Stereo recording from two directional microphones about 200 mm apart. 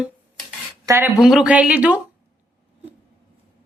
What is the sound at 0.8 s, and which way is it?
Speech, 15° right (ahead or behind).